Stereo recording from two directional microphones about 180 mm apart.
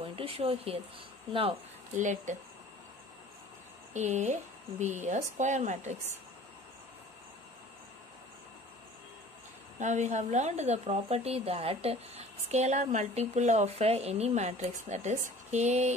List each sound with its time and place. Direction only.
0.0 s speech: 30° right (ahead or behind)
2.0 s speech: 45° right (ahead or behind)
3.9 s a woman's voice: 40° right (ahead or behind)
9.8 s a woman's voice: 40° right (ahead or behind)